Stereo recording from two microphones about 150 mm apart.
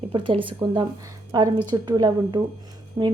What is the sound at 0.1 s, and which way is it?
A woman's voice, 35° right (ahead or behind).